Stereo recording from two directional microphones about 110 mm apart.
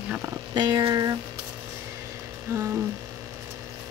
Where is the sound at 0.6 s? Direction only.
40° right (ahead or behind).